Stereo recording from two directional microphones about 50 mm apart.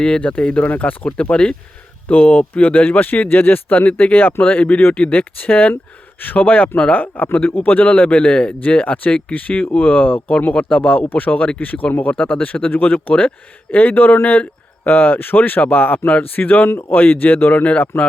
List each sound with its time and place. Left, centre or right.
0.2 s speech: left
2.0 s speech: left
16.6 s speech: left
17.0 s speech: left